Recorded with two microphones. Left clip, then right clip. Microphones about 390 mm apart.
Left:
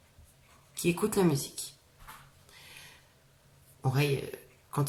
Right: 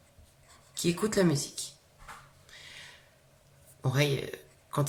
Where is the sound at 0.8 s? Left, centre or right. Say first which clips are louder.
Even; centre.